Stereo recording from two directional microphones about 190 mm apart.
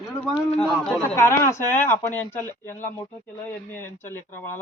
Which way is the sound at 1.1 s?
15° left (ahead or behind).